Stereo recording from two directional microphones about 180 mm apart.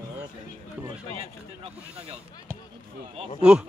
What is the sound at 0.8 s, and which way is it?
Speech, 30° right (ahead or behind).